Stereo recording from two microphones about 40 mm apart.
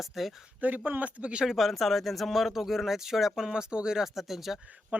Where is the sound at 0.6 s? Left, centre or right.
Right.